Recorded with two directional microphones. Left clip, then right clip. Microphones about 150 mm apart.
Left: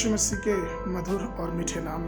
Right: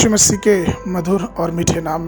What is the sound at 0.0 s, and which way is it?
Speech, 60° right (ahead or behind).